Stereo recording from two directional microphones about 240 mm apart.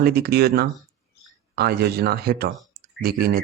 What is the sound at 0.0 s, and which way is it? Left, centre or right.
Speech, right.